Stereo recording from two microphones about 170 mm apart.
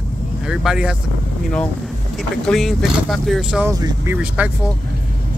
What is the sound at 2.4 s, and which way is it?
Speech, centre (ahead or behind).